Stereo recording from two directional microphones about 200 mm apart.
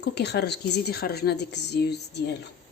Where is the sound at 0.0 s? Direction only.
55° left (ahead or behind).